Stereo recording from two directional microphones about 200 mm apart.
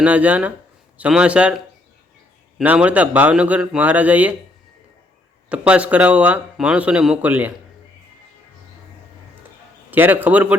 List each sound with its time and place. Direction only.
0.0 s a man's voice: 5° right (ahead or behind)
2.6 s speech: 5° right (ahead or behind)
5.5 s speech: 5° right (ahead or behind)
9.9 s speech: 10° right (ahead or behind)